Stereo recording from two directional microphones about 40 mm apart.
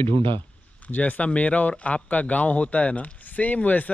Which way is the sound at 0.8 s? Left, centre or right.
Left.